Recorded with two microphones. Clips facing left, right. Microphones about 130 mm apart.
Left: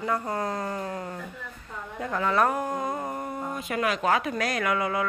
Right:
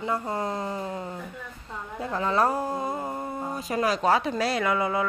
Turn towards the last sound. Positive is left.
turn(degrees=-25)  # may be behind; listen again after turning